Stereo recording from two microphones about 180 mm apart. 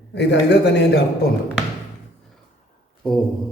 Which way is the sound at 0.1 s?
70° left (ahead or behind).